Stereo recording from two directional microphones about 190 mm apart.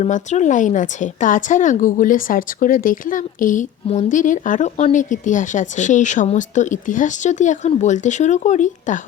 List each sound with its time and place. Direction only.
0.0 s speech: 40° left (ahead or behind)